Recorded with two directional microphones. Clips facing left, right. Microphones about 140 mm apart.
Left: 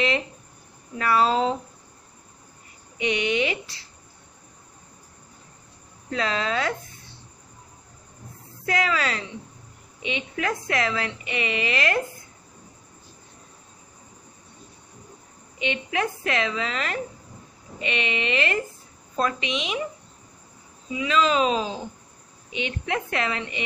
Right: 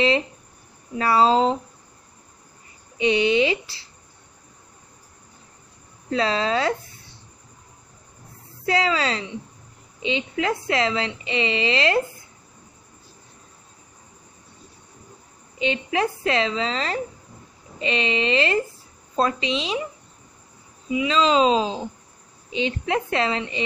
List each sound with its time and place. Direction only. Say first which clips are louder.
0.9 s a woman's voice: right 3 dB; 25° right (ahead or behind)
3.0 s a woman's voice: right 5 dB; 30° right (ahead or behind)
6.0 s a woman's voice: right 4 dB; 30° right (ahead or behind)
8.6 s a woman's voice: right 3 dB; 25° right (ahead or behind)
15.6 s a woman's voice: right 3 dB; 30° right (ahead or behind)
21.1 s a woman's voice: right 3 dB; 30° right (ahead or behind)